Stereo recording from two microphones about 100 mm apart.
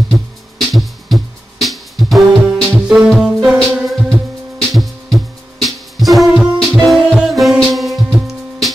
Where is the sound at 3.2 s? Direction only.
5° right (ahead or behind).